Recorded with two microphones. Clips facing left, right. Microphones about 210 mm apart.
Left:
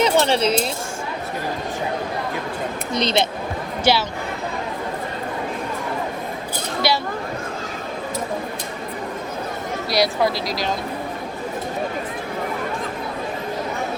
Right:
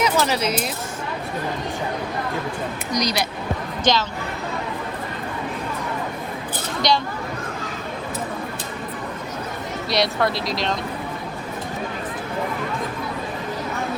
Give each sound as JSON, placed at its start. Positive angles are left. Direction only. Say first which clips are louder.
{"t": 0.0, "sound": "speech", "louder": "left 3 dB", "side_deg": 30}
{"t": 2.9, "sound": "speech", "louder": "left 3 dB", "side_deg": 25}
{"t": 3.9, "sound": "speech", "louder": "left 1 dB", "side_deg": 10}
{"t": 9.9, "sound": "speech", "louder": "left 2 dB", "side_deg": 0}